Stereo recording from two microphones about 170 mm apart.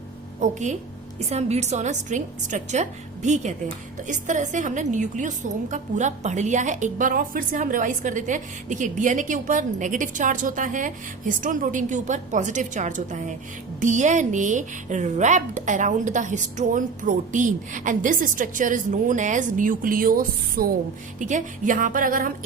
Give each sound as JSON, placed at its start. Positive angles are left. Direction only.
{"t": 0.3, "sound": "a woman's voice", "side_deg": -45}
{"t": 21.2, "sound": "a woman's voice", "side_deg": -45}